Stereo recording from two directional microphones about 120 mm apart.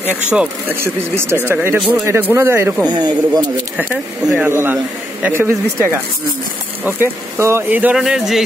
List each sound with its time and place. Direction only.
0.0 s speech: 10° right (ahead or behind)
2.9 s speech: 35° right (ahead or behind)
4.5 s speech: 20° right (ahead or behind)
8.0 s speech: 5° right (ahead or behind)